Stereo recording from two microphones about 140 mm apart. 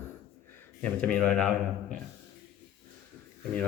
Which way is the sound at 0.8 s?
5° left (ahead or behind).